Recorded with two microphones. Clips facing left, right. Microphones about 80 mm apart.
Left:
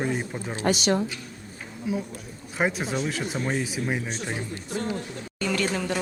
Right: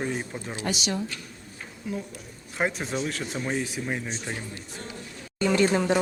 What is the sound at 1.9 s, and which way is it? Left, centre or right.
Speech, centre.